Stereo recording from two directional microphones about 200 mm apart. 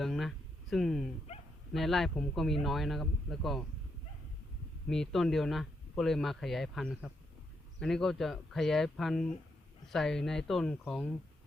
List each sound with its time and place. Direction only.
0.0 s a sound: centre (ahead or behind)
1.7 s speech: centre (ahead or behind)
4.9 s speech: centre (ahead or behind)